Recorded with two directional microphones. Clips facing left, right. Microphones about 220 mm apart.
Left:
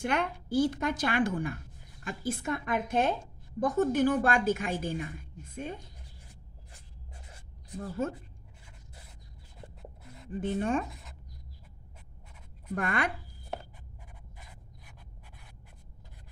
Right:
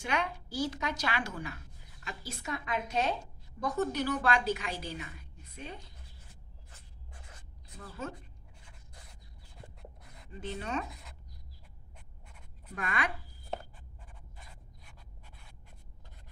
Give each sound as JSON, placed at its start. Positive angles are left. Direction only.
{"t": 0.0, "sound": "a woman's voice", "side_deg": 55}
{"t": 7.8, "sound": "a woman's voice", "side_deg": 50}
{"t": 10.2, "sound": "a woman's voice", "side_deg": 50}
{"t": 12.7, "sound": "a woman's voice", "side_deg": 50}